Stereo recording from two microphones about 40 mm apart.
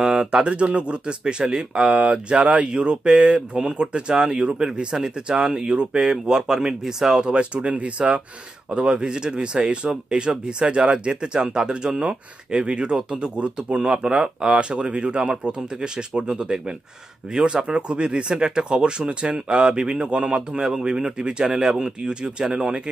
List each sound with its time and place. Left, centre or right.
0.0 s speech: centre